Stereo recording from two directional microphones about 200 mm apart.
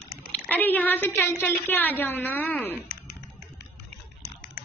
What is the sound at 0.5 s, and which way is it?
A woman's voice, 10° left (ahead or behind).